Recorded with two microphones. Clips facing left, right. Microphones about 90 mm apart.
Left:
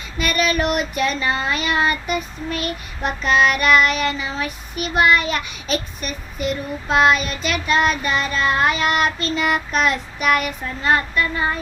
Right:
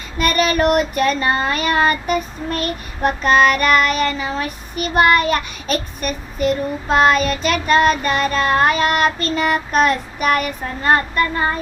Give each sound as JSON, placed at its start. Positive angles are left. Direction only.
{"t": 0.2, "sound": "child singing", "side_deg": -45}